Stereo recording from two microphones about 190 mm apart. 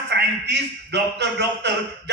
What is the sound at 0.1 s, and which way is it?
A man's voice, 65° right (ahead or behind).